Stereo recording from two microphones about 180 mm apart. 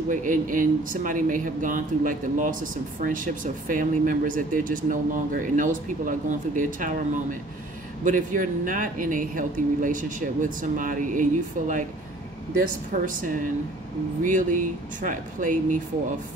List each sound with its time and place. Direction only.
0.1 s speech: 45° right (ahead or behind)
12.9 s speech: 50° right (ahead or behind)